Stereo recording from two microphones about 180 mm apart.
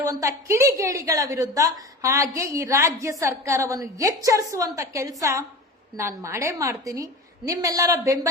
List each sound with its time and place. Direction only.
0.0 s a woman's voice: 15° right (ahead or behind)